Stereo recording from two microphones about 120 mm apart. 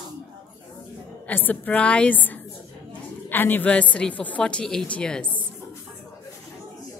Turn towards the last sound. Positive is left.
turn(degrees=10)  # may be behind; listen again after turning